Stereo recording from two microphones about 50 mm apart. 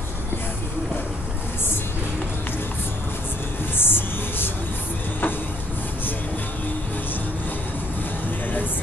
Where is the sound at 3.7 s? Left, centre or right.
Left.